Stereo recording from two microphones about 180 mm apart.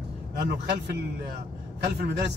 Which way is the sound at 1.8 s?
70° right (ahead or behind).